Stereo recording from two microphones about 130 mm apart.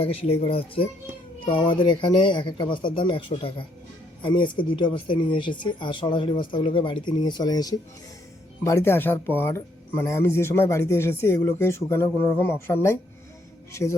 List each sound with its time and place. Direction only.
0.0 s speech: 45° left (ahead or behind); by 7.8 s 30° left (ahead or behind)
8.6 s speech: 20° left (ahead or behind)